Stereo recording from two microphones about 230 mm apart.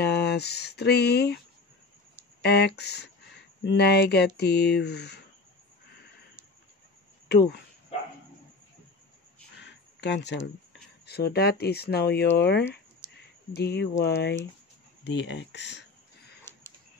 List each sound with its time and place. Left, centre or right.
0.0 s speech: left
2.4 s speech: left
7.2 s speech: left
9.6 s a sound: left
11.1 s speech: left
16.5 s a sound: centre